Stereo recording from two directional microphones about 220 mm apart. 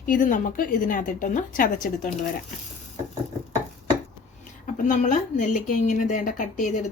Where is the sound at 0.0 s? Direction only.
40° left (ahead or behind).